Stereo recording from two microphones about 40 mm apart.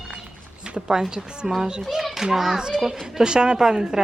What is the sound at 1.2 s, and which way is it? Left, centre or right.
Speech, right.